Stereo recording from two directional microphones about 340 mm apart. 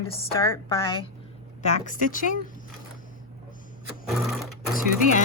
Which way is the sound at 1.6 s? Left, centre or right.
Left.